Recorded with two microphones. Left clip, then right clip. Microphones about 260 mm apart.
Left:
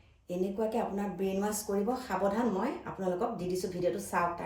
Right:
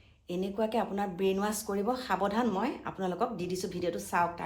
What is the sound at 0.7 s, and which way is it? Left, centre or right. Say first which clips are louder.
Speech: right 2 dB; centre.